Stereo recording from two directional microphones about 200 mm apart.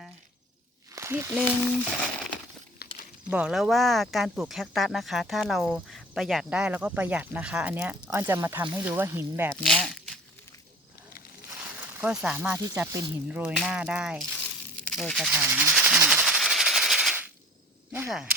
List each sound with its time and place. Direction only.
0.9 s speech: 15° right (ahead or behind)
2.8 s walk: 50° left (ahead or behind)
3.2 s speech: 5° right (ahead or behind)
9.6 s crumpling: centre (ahead or behind)
11.9 s speech: 5° right (ahead or behind)
14.8 s hiss: centre (ahead or behind)
17.9 s speech: 5° right (ahead or behind)